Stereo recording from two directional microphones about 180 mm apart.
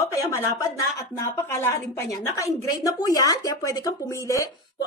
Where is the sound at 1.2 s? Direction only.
15° left (ahead or behind).